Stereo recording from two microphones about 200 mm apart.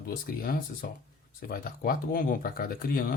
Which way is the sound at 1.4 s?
45° left (ahead or behind).